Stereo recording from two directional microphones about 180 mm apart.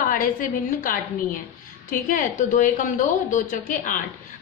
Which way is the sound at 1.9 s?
50° left (ahead or behind).